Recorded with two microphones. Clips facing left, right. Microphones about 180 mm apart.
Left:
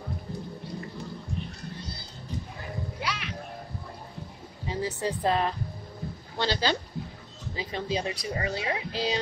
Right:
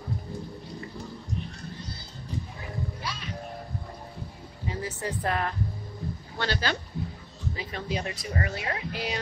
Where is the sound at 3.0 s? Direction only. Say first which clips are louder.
Left 3 dB; 80° left.